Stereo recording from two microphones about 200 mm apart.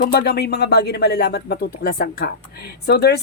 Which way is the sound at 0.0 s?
50° left (ahead or behind).